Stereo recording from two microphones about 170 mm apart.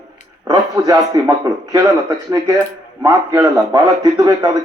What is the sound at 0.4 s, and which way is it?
Speech, 20° right (ahead or behind).